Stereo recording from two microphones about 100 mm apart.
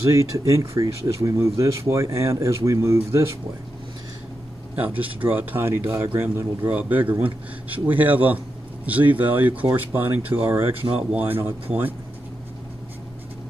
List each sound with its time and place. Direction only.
0.1 s speech: 30° right (ahead or behind)
4.7 s speech: 15° right (ahead or behind)